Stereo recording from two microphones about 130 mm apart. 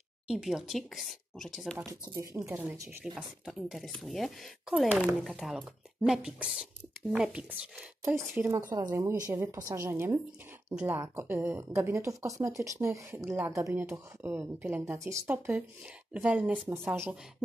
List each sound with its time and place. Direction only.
0.3 s speech: 5° right (ahead or behind)
1.9 s speech: 25° right (ahead or behind)
3.2 s speech: 5° right (ahead or behind)
8.0 s speech: 20° right (ahead or behind)